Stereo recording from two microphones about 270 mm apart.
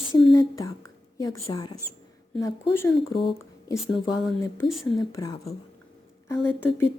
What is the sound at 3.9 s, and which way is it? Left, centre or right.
Speech, centre.